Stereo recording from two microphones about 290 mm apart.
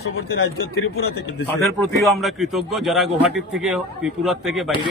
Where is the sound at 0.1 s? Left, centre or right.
Left.